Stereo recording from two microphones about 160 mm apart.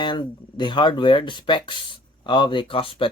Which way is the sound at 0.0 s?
30° left (ahead or behind).